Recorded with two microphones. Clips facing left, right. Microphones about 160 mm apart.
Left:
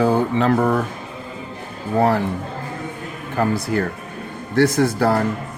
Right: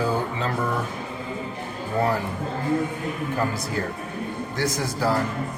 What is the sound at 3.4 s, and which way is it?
Speech, 65° left (ahead or behind).